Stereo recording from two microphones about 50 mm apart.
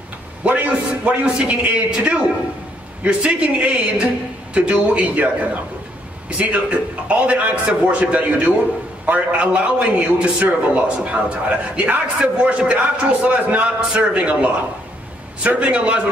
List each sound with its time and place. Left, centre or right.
0.4 s a sound: right
1.9 s a man's voice: centre
13.7 s a man's voice: centre
15.4 s a man's voice: right